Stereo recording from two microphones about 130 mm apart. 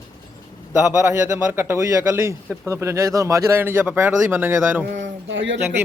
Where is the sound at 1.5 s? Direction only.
20° right (ahead or behind).